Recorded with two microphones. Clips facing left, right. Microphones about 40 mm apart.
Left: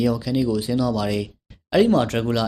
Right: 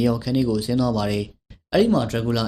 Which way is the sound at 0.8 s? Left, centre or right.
Centre.